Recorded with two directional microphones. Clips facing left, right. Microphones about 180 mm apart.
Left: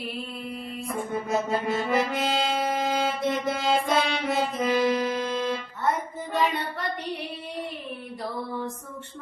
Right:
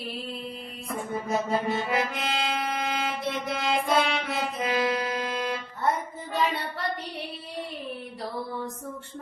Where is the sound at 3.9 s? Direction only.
Centre (ahead or behind).